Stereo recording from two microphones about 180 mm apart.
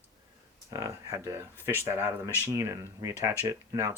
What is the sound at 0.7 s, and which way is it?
Speech, 15° right (ahead or behind).